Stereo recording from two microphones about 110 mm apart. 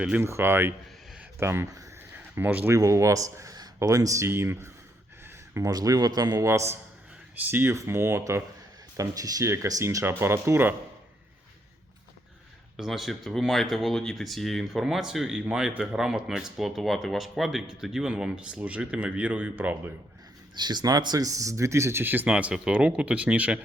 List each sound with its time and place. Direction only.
0.2 s speech: 25° right (ahead or behind)
2.3 s speech: 15° right (ahead or behind)
2.7 s a man's voice: 30° right (ahead or behind)
12.7 s speech: centre (ahead or behind)
20.6 s speech: 40° right (ahead or behind); by 23.6 s 10° right (ahead or behind)